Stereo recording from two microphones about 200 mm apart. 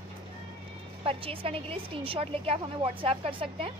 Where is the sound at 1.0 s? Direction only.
30° right (ahead or behind).